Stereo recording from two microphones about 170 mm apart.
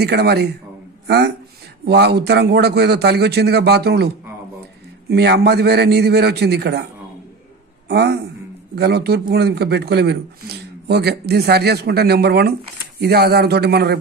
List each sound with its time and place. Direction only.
0.0 s speech: 70° right (ahead or behind)
1.0 s speech: 80° right
5.1 s speech: 75° right (ahead or behind)
7.9 s speech: 75° right (ahead or behind)